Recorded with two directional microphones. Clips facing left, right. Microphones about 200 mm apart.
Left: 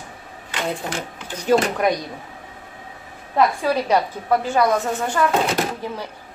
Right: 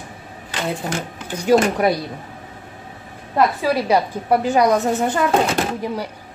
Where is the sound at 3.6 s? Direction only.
10° right (ahead or behind).